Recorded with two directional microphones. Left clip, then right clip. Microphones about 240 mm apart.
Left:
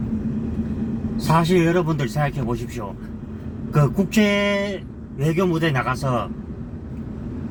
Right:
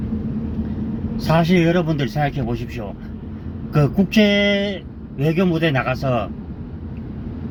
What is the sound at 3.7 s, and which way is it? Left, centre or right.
Speech, centre.